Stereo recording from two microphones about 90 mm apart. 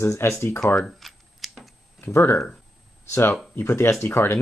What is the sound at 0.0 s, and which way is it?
Speech, 30° left (ahead or behind).